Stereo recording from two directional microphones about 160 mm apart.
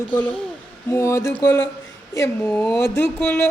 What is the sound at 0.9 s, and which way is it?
A woman's voice, 15° left (ahead or behind).